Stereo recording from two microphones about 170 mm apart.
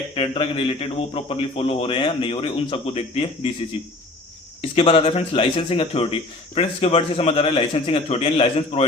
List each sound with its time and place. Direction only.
0.1 s a man's voice: 30° left (ahead or behind)
4.7 s a man's voice: 35° left (ahead or behind)